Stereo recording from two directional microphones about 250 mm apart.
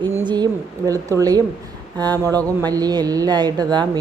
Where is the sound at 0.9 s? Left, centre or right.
Centre.